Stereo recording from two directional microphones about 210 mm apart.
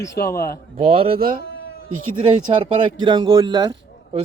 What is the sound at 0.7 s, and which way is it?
Speech, 25° right (ahead or behind).